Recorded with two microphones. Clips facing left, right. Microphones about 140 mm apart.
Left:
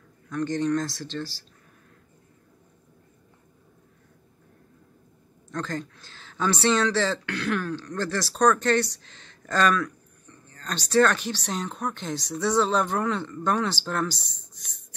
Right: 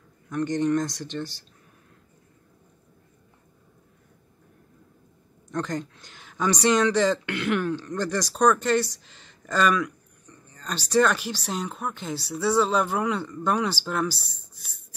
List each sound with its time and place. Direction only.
0.3 s speech: 20° right (ahead or behind)
5.5 s speech: 20° right (ahead or behind)